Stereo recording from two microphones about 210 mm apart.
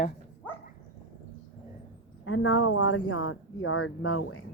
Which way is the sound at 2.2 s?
85° left.